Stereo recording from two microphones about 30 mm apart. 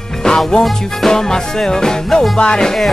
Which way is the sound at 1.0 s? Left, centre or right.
Centre.